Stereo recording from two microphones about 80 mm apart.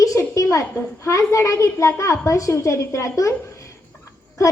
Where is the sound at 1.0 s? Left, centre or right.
Left.